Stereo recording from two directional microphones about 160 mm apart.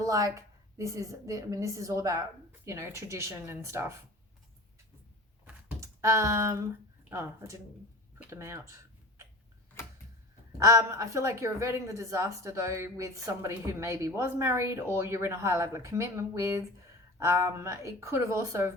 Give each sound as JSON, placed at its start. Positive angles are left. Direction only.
{"t": 0.0, "sound": "a woman's voice", "side_deg": -20}
{"t": 5.8, "sound": "typing", "side_deg": -20}
{"t": 7.1, "sound": "a woman's voice", "side_deg": -15}
{"t": 9.8, "sound": "tick-tock", "side_deg": 15}
{"t": 10.6, "sound": "a woman's voice", "side_deg": -20}